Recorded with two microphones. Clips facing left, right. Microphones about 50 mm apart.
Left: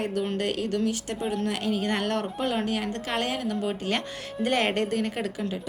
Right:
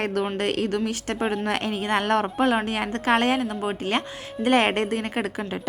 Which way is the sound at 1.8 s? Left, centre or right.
Right.